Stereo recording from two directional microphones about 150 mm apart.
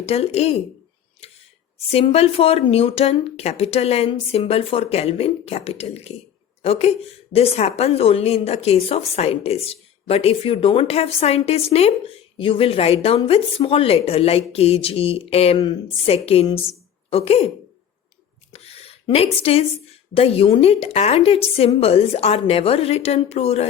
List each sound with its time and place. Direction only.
0.0 s speech: 45° left (ahead or behind)
1.9 s a woman's voice: 40° left (ahead or behind)
18.5 s a sound: 40° left (ahead or behind)
20.1 s speech: 40° left (ahead or behind)